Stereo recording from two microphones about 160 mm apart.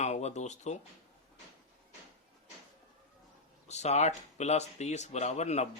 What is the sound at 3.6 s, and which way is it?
A man's voice, 45° left (ahead or behind).